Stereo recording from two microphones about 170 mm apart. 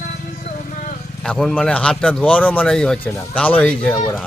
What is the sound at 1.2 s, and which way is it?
A man's voice, 5° left (ahead or behind).